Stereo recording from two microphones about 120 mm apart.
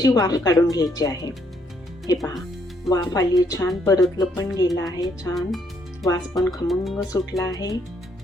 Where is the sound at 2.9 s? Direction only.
30° left (ahead or behind).